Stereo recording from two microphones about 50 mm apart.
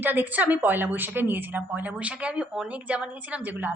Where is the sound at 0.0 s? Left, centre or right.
Right.